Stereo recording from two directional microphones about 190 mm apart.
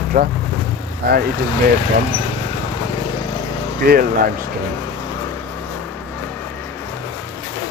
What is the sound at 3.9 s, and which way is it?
Speech, 50° right (ahead or behind).